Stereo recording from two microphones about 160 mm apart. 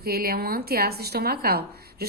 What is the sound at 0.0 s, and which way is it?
Speech, 70° right (ahead or behind).